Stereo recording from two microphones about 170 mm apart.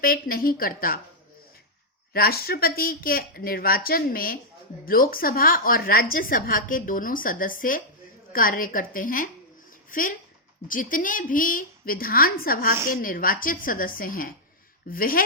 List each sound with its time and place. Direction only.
0.0 s speech: 60° left (ahead or behind)
2.1 s speech: 65° left (ahead or behind)